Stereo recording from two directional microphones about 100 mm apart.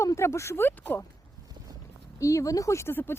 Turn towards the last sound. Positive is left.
turn(degrees=20)  # may be behind; listen again after turning